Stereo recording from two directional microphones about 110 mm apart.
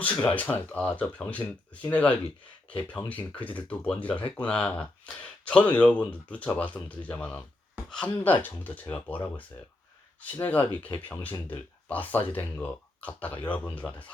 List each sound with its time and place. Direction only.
0.0 s speech: 15° left (ahead or behind)
10.2 s speech: 15° left (ahead or behind)